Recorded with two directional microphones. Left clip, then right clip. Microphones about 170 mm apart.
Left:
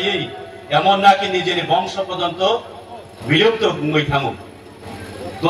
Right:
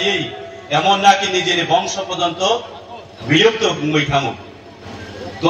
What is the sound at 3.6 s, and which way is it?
Speech, 10° left (ahead or behind).